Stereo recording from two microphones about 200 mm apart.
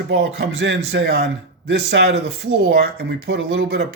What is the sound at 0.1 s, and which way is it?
A man's voice, 60° right (ahead or behind).